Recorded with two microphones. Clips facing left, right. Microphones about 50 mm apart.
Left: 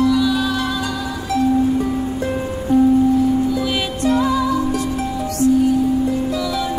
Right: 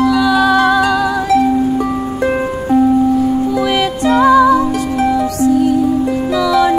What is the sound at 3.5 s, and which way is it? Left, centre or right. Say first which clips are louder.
Music: right 6 dB; right.